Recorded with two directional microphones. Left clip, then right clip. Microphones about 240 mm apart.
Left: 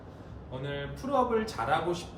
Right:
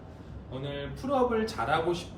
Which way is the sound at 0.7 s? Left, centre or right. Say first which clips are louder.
Right 1 dB; centre.